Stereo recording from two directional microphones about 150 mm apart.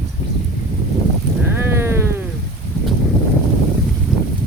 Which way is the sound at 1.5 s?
15° right (ahead or behind).